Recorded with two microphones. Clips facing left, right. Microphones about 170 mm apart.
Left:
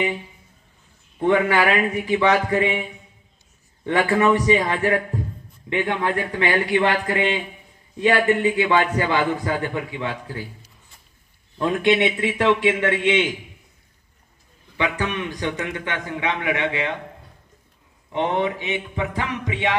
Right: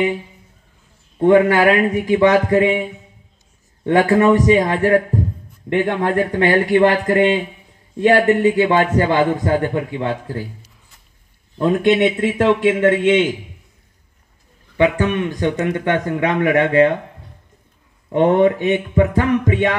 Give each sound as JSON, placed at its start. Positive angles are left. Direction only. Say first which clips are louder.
{"t": 1.1, "sound": "a man's voice", "louder": "right 6 dB", "side_deg": -45}
{"t": 11.6, "sound": "a man's voice", "louder": "right 4 dB", "side_deg": -45}
{"t": 14.8, "sound": "a man's voice", "louder": "right 8 dB", "side_deg": -50}
{"t": 18.1, "sound": "a man's voice", "louder": "right 9 dB", "side_deg": -50}